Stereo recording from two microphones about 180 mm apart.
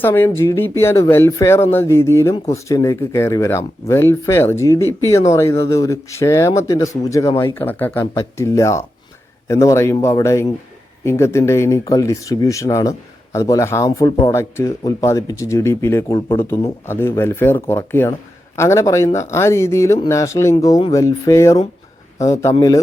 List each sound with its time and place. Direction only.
0.0 s speech: 15° left (ahead or behind)